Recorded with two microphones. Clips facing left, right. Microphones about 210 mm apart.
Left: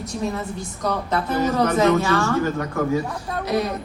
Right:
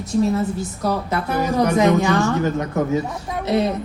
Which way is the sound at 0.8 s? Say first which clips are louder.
Even; 10° right (ahead or behind).